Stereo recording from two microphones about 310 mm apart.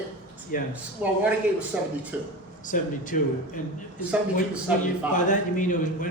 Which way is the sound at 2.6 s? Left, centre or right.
Left.